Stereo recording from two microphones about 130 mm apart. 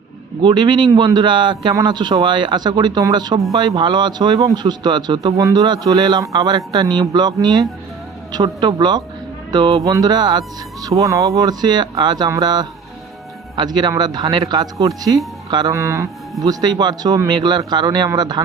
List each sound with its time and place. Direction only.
0.4 s speech: 35° right (ahead or behind)
15.7 s speech: 20° right (ahead or behind)